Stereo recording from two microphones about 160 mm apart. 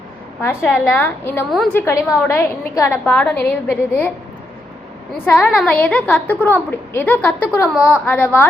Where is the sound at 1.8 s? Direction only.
15° left (ahead or behind).